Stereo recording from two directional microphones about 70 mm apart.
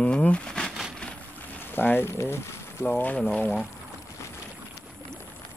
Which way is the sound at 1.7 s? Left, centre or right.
Left.